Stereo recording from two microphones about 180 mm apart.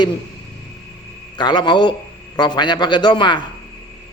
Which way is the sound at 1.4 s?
25° left (ahead or behind).